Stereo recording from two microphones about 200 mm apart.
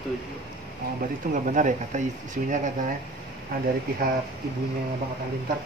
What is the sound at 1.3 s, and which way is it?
Speech, 40° right (ahead or behind).